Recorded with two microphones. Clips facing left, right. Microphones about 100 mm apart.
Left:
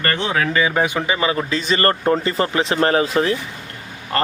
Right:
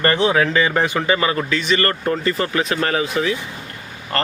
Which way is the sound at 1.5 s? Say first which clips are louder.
Left 1 dB; 35° left (ahead or behind).